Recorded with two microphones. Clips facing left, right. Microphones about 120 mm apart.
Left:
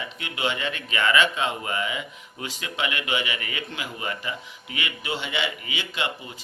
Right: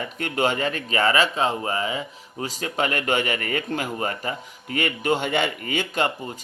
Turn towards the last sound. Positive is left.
turn(degrees=-45)  # may be behind; listen again after turning